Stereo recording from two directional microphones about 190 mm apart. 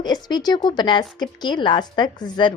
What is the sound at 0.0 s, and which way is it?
Speech, 20° left (ahead or behind).